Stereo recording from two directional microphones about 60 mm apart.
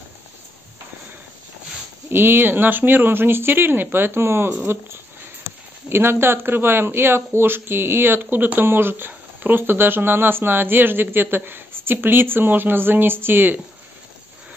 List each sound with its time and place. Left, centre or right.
2.0 s speech: right
5.9 s speech: right